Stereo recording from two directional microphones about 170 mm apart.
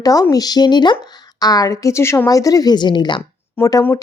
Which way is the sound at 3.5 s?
15° left (ahead or behind).